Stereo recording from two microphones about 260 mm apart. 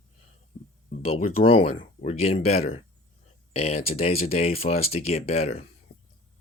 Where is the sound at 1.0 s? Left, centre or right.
Left.